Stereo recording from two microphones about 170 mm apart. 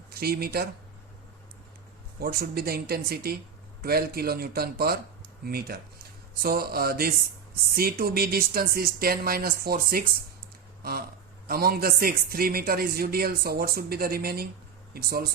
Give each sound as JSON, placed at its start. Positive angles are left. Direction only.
{"t": 0.1, "sound": "speech", "side_deg": -65}
{"t": 2.1, "sound": "a man's voice", "side_deg": -60}
{"t": 11.4, "sound": "a man's voice", "side_deg": -60}